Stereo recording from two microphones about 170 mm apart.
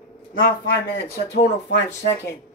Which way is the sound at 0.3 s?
60° left (ahead or behind).